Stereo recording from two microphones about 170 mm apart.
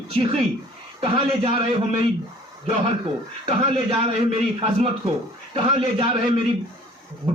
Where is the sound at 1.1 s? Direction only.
30° right (ahead or behind).